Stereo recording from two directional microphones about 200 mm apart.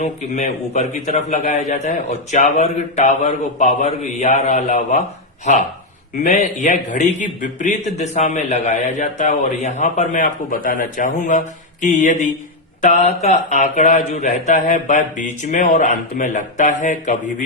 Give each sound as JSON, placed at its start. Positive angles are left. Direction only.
{"t": 0.0, "sound": "a man's voice", "side_deg": 35}